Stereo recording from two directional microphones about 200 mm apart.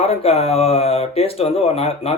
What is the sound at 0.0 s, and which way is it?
Speech, 30° left (ahead or behind).